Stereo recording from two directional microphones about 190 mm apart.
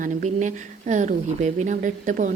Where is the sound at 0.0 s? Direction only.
40° right (ahead or behind).